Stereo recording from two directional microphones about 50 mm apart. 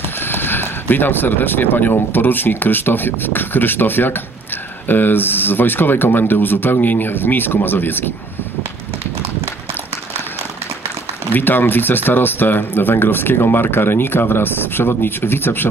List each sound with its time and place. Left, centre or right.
0.3 s speech: left
11.3 s speech: left